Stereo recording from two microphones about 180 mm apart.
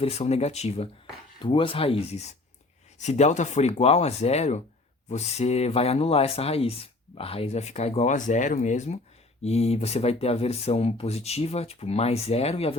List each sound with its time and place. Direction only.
0.0 s speech: 35° left (ahead or behind)